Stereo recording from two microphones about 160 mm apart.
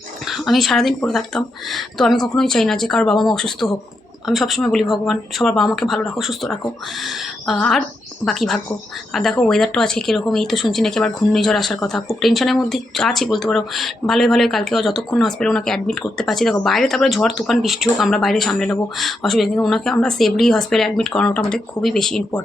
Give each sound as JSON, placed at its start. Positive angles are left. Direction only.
{"t": 0.3, "sound": "speech", "side_deg": 0}